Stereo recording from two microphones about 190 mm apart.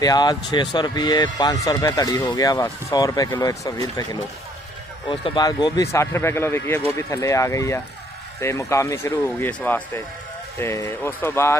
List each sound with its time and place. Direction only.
0.0 s speech: 20° left (ahead or behind)